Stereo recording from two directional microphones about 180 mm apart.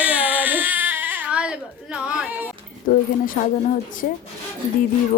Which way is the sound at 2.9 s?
50° left (ahead or behind).